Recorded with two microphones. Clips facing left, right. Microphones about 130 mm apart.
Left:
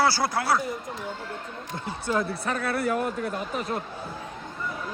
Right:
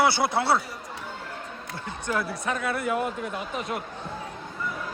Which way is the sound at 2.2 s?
40° left (ahead or behind).